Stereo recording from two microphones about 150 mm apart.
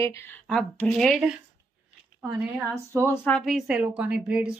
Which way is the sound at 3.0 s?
15° left (ahead or behind).